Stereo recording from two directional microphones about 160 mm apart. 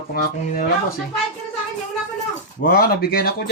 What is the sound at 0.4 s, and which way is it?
Speech, 55° left (ahead or behind).